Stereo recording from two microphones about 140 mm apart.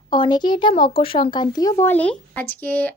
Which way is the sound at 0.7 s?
45° left (ahead or behind).